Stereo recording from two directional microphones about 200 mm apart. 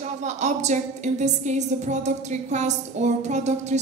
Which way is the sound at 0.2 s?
35° right (ahead or behind).